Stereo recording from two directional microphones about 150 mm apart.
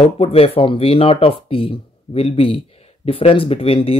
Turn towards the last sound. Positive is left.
turn(degrees=40)  # may be behind; listen again after turning